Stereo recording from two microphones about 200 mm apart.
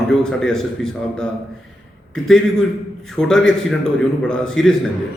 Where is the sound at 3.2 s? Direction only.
5° left (ahead or behind).